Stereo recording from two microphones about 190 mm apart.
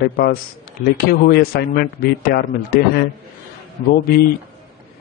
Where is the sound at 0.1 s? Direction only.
50° left (ahead or behind).